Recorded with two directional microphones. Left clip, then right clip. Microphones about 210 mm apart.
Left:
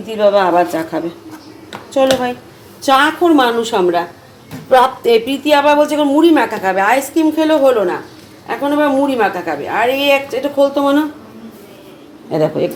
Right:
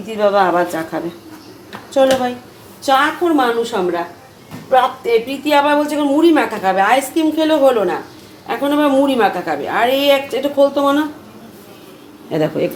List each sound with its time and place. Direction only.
0.1 s a woman's voice: 10° left (ahead or behind)
2.8 s a woman's voice: 20° left (ahead or behind)
5.4 s a woman's voice: 15° left (ahead or behind); by 10.2 s centre (ahead or behind)
10.4 s a woman's voice: 10° left (ahead or behind)
12.3 s a woman's voice: 5° left (ahead or behind)